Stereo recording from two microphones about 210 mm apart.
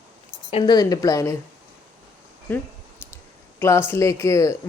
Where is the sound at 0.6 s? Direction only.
20° left (ahead or behind).